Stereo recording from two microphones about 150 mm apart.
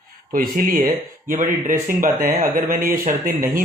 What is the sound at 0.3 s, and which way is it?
A man's voice, 65° right (ahead or behind).